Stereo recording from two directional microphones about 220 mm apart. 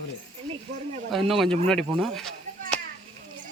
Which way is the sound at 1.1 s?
Centre (ahead or behind).